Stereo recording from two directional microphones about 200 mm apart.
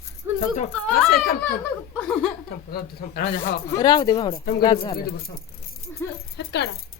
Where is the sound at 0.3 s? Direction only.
35° left (ahead or behind).